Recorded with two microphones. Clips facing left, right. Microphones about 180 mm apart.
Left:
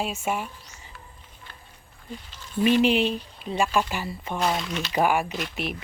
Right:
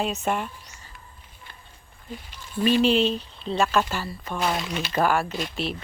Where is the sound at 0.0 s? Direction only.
5° left (ahead or behind).